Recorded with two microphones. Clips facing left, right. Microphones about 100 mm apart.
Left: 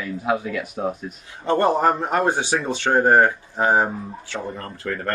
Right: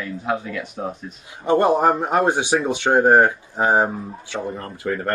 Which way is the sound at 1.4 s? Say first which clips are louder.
Right 2 dB; 15° right (ahead or behind).